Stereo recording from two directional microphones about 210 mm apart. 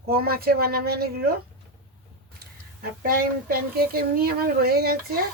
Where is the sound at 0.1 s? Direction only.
45° right (ahead or behind).